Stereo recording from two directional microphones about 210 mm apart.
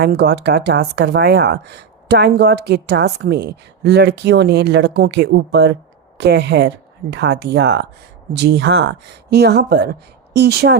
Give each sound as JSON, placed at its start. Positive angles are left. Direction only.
{"t": 0.0, "sound": "speech", "side_deg": -50}